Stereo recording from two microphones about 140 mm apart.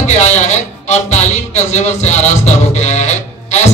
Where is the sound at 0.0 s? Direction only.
55° left (ahead or behind).